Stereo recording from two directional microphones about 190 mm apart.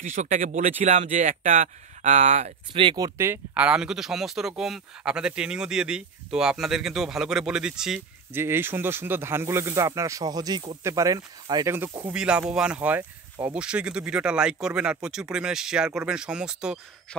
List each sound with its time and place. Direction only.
0.0 s speech: 40° right (ahead or behind)
2.7 s speech: 25° right (ahead or behind); by 17.2 s 5° right (ahead or behind)